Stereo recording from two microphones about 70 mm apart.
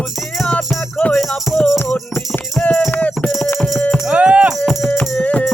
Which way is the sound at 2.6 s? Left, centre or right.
Centre.